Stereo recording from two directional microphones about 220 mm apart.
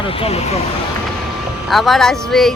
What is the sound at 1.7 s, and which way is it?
Speech, centre (ahead or behind).